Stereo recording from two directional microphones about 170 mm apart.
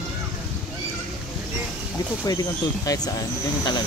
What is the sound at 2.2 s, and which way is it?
Speech, 20° left (ahead or behind).